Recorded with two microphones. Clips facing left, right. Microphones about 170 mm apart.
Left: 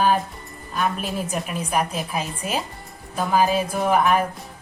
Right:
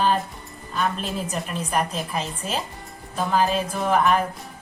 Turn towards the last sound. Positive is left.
turn(degrees=10)  # may be behind; listen again after turning